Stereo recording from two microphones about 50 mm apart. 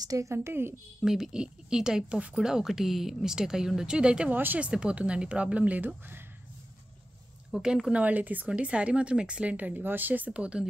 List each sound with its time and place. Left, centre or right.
0.2 s a woman's voice: right
1.0 s speech: centre
4.3 s speech: right
4.6 s speech: right
5.8 s speech: right
7.6 s speech: centre
7.9 s speech: right
8.5 s speech: right